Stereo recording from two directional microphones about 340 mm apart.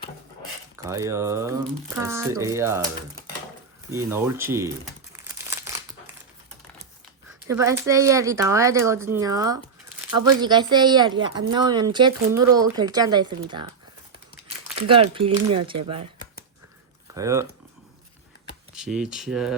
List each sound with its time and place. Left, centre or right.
0.9 s speech: centre
3.9 s speech: centre
5.1 s crumpling: centre
7.4 s speech: centre
14.8 s speech: centre
17.2 s speech: centre
18.7 s speech: centre